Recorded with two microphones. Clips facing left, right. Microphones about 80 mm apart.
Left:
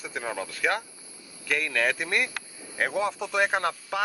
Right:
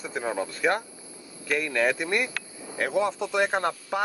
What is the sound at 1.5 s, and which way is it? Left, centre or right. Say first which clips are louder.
Speech: right 2 dB; centre.